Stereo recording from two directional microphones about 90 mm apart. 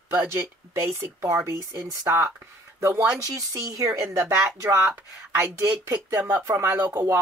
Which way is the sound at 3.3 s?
40° right (ahead or behind).